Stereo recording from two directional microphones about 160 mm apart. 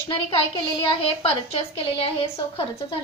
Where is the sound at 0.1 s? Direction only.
35° left (ahead or behind).